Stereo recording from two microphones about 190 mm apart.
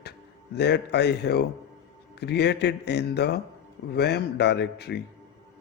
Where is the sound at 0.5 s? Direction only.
60° left (ahead or behind).